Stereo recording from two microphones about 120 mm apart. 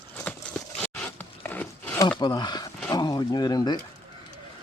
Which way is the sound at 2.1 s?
35° left (ahead or behind).